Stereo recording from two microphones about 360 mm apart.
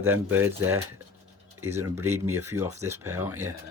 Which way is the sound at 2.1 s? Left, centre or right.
Right.